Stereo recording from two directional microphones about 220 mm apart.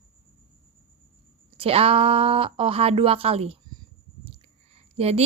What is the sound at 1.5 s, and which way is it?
A woman's voice, 25° right (ahead or behind).